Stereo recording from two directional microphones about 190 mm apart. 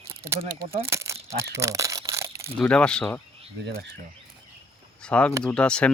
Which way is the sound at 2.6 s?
5° left (ahead or behind).